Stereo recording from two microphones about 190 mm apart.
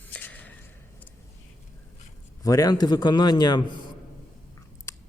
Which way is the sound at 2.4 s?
20° left (ahead or behind).